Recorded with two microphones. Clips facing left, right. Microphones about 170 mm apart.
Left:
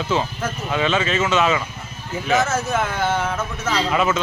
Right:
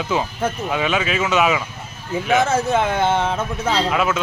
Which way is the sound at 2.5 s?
25° right (ahead or behind).